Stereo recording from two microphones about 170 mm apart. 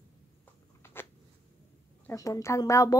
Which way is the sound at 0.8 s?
15° left (ahead or behind).